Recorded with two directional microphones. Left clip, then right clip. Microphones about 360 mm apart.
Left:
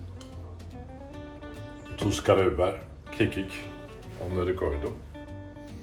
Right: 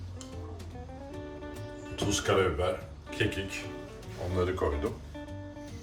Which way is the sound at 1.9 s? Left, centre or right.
Centre.